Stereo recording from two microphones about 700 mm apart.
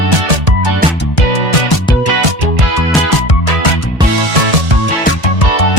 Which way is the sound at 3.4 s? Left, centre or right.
Left.